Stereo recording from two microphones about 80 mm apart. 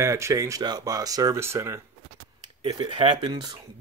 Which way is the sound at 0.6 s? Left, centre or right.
Right.